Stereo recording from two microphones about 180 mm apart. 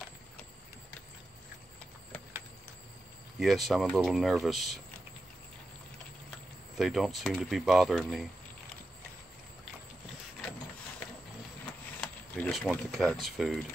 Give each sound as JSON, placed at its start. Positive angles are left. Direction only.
{"t": 3.3, "sound": "speech", "side_deg": 0}
{"t": 6.8, "sound": "speech", "side_deg": 0}
{"t": 12.0, "sound": "mechanisms", "side_deg": 0}